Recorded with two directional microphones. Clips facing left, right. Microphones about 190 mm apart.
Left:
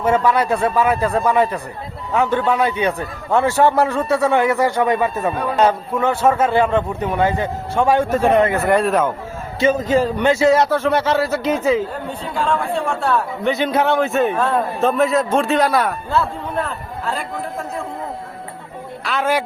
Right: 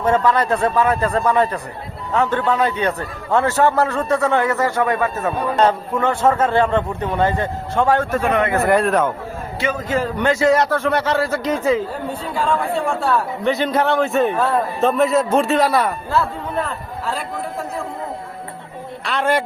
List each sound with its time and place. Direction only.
0.0 s a man's voice: 10° left (ahead or behind)
8.2 s speech: 30° left (ahead or behind)
8.6 s speech: centre (ahead or behind)
9.6 s speech: 25° left (ahead or behind)
10.9 s speech: 5° left (ahead or behind)
11.4 s speech: 25° left (ahead or behind)
12.3 s speech: 5° right (ahead or behind)
19.0 s speech: 5° left (ahead or behind)